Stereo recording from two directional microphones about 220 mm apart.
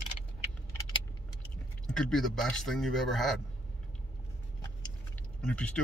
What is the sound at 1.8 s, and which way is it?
Speech, 5° left (ahead or behind).